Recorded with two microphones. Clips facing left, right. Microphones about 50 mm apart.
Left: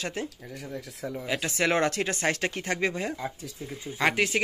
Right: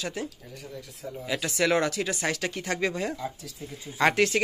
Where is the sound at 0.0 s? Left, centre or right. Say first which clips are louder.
Even; left.